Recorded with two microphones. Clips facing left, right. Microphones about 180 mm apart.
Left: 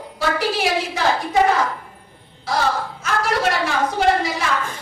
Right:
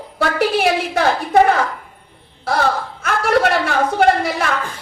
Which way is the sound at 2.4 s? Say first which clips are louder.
Right 3 dB; 55° right (ahead or behind).